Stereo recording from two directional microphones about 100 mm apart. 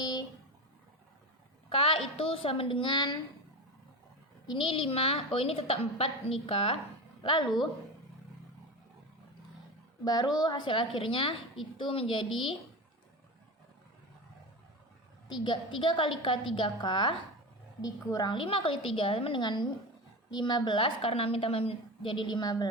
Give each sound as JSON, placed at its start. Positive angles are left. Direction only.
{"t": 0.0, "sound": "a sound", "side_deg": 45}
{"t": 1.7, "sound": "a sound", "side_deg": 65}
{"t": 2.1, "sound": "a woman's voice", "side_deg": 70}
{"t": 4.4, "sound": "a woman's voice", "side_deg": 55}
{"t": 6.4, "sound": "a woman's voice", "side_deg": 65}
{"t": 10.0, "sound": "a woman's voice", "side_deg": 40}
{"t": 15.4, "sound": "a woman's voice", "side_deg": 55}
{"t": 17.7, "sound": "a woman's voice", "side_deg": 40}
{"t": 18.4, "sound": "a woman's voice", "side_deg": 65}
{"t": 19.4, "sound": "a woman's voice", "side_deg": 50}